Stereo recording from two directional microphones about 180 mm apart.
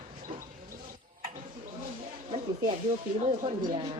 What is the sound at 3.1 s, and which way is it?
Speech, 30° right (ahead or behind).